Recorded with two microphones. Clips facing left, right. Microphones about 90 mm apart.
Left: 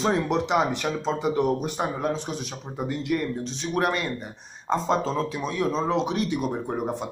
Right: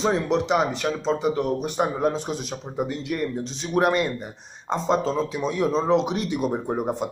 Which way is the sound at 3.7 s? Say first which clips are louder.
Right 5 dB; 15° right (ahead or behind).